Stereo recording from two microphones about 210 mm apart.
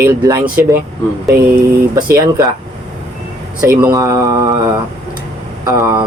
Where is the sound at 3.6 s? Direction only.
10° right (ahead or behind).